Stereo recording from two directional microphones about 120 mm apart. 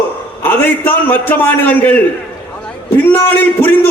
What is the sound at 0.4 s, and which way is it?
A man's voice, 15° left (ahead or behind).